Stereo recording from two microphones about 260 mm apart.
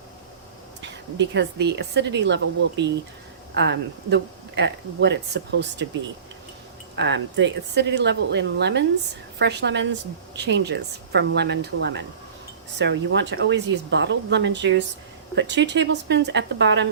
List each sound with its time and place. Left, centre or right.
1.2 s speech: right
6.9 s speech: right